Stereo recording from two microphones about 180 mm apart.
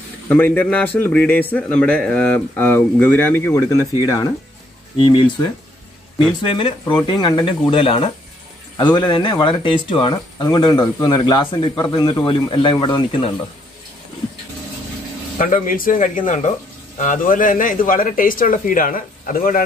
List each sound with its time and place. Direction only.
0.3 s a man's voice: 10° left (ahead or behind); by 13.3 s 30° left (ahead or behind)
15.3 s speech: 50° left (ahead or behind)